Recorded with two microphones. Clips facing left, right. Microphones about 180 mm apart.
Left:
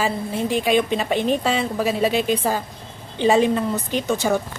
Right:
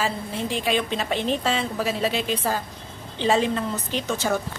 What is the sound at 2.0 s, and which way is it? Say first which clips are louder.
Speech: left 7 dB; 50° left (ahead or behind).